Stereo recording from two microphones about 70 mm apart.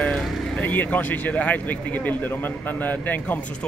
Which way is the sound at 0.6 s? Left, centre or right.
Left.